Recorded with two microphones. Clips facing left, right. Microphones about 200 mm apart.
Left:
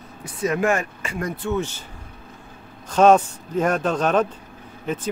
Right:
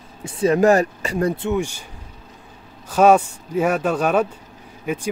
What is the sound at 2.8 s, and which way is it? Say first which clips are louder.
Speech: right 1 dB; 10° right (ahead or behind).